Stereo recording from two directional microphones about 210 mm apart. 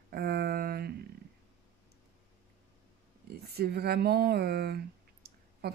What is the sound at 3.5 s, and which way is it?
A woman's voice, 50° right (ahead or behind).